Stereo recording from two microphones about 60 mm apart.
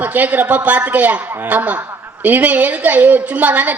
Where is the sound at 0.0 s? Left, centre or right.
Right.